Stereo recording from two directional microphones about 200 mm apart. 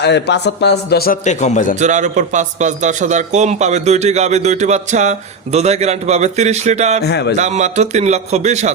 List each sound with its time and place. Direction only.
0.0 s a man's voice: 60° left (ahead or behind); by 1.7 s 35° left (ahead or behind)
1.8 s a man's voice: 35° right (ahead or behind)
7.0 s speech: 55° left (ahead or behind)
7.3 s a man's voice: 35° right (ahead or behind)